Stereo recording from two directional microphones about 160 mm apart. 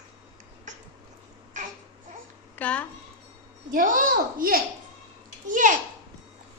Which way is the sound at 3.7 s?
60° right (ahead or behind).